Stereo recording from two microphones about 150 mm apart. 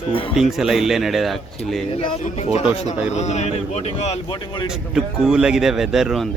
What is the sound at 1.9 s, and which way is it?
Speech, 35° left (ahead or behind).